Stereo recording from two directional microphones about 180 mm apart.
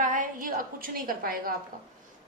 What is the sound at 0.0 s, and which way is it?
A woman's voice, 45° right (ahead or behind).